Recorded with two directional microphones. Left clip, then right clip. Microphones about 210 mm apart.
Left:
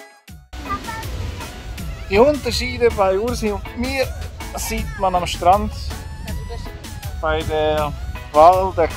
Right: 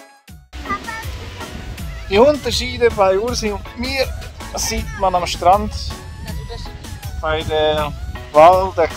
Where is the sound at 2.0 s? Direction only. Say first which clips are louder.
Right 2 dB; 15° right (ahead or behind).